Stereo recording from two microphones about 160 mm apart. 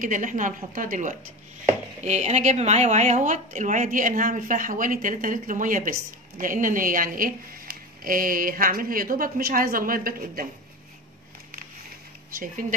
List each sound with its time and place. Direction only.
0.0 s speech: 55° right (ahead or behind)